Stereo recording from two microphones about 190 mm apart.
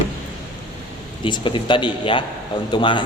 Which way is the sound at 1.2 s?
25° left (ahead or behind).